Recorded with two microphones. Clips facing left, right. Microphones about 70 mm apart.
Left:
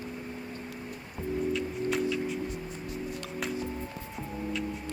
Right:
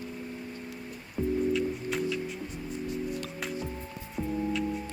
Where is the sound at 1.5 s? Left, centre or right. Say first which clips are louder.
Even; centre.